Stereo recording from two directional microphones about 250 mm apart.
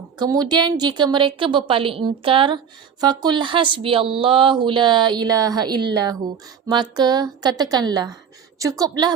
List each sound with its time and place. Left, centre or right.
0.2 s speech: centre